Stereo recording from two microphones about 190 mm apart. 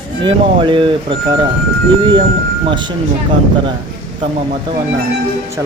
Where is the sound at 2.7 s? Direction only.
25° right (ahead or behind).